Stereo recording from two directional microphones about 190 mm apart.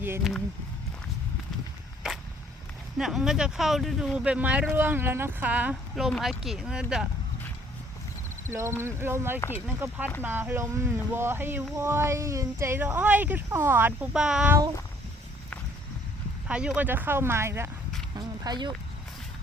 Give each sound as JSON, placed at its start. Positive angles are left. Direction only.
{"t": 0.0, "sound": "speech", "side_deg": -5}
{"t": 3.0, "sound": "speech", "side_deg": 0}
{"t": 8.4, "sound": "speech", "side_deg": -15}
{"t": 16.5, "sound": "speech", "side_deg": -5}